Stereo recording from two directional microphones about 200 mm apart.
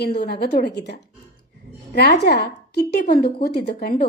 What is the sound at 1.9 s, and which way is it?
A woman's voice, 55° left (ahead or behind).